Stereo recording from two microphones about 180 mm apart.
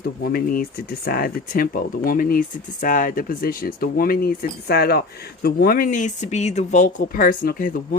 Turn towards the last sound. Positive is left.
turn(degrees=50)  # may be behind; listen again after turning